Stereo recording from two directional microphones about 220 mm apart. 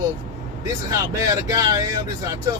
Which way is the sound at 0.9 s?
15° right (ahead or behind).